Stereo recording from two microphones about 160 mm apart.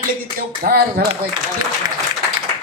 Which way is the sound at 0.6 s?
75° right (ahead or behind).